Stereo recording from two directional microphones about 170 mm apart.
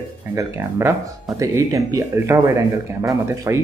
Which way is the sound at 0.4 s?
15° right (ahead or behind).